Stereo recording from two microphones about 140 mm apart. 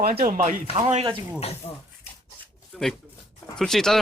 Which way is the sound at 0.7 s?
50° right (ahead or behind).